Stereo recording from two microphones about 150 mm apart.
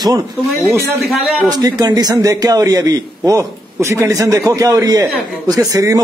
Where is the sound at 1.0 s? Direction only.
Centre (ahead or behind).